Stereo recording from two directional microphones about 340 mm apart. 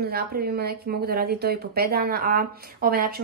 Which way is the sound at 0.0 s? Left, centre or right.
Right.